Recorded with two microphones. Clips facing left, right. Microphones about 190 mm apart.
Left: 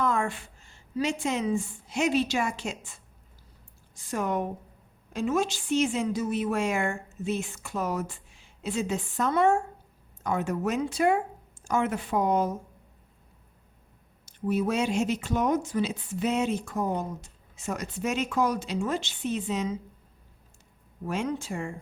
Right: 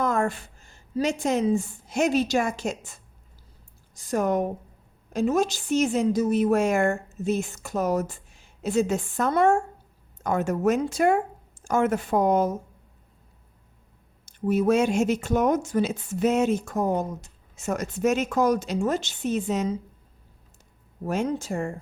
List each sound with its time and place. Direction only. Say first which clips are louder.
0.0 s a woman's voice: right 3 dB; 40° right (ahead or behind)
14.3 s speech: right 5 dB; 45° right (ahead or behind)
21.0 s speech: right 4 dB; 40° right (ahead or behind)